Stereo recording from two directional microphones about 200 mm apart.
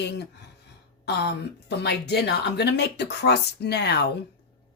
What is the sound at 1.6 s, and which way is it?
Speech, 55° left (ahead or behind).